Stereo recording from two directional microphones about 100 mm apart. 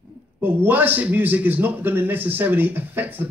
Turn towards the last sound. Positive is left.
turn(degrees=-20)  # may be behind; listen again after turning